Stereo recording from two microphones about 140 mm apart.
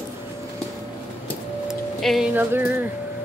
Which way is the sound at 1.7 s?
Centre (ahead or behind).